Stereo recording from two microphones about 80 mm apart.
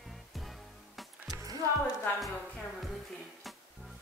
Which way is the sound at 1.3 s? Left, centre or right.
Right.